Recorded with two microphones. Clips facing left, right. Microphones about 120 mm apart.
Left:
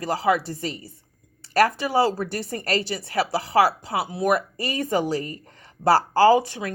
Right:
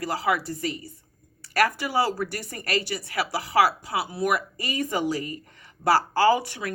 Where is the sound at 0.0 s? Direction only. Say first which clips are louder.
Left 4 dB; 25° left (ahead or behind).